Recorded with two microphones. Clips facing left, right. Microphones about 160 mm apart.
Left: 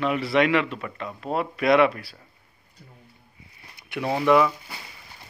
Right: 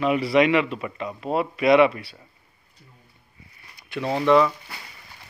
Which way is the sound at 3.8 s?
15° left (ahead or behind).